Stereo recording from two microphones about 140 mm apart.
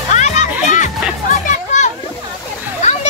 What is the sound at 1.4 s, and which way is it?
Children playing, 60° left (ahead or behind).